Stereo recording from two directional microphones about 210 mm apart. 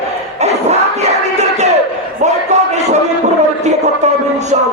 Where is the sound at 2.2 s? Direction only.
35° right (ahead or behind).